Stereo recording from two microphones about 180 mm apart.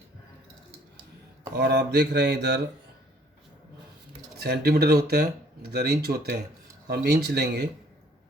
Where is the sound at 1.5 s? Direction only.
65° right (ahead or behind).